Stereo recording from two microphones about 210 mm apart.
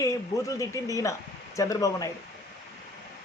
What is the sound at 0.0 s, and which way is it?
Speech, 15° left (ahead or behind).